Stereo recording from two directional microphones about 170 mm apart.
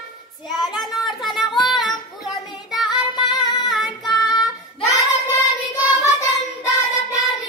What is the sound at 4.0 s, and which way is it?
Child singing, 25° left (ahead or behind).